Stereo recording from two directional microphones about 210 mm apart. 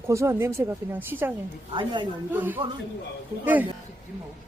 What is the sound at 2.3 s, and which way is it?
Speech, 10° right (ahead or behind).